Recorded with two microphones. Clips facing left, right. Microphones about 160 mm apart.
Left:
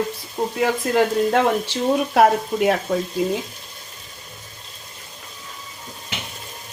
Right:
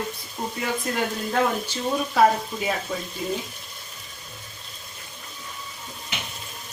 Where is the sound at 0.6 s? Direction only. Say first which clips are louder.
Left 8 dB; 80° left.